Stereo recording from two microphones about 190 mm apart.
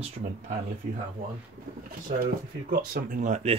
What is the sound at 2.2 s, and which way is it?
Speech, 50° right (ahead or behind).